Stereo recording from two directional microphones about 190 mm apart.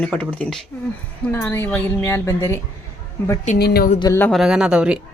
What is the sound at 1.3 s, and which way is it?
Speech, 10° left (ahead or behind).